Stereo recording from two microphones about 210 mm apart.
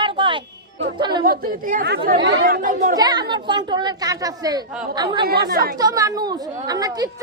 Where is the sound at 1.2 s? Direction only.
40° right (ahead or behind).